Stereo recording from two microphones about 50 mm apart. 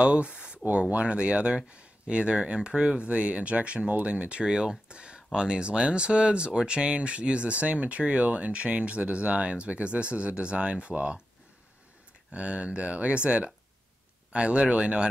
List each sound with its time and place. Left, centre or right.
0.0 s speech: right
12.3 s speech: right